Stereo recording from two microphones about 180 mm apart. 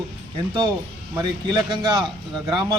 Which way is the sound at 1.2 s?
25° right (ahead or behind).